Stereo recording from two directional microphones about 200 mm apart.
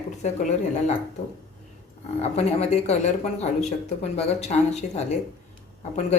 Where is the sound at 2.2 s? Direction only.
30° left (ahead or behind).